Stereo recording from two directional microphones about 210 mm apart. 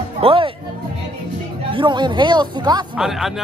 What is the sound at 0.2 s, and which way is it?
Speech, 25° right (ahead or behind).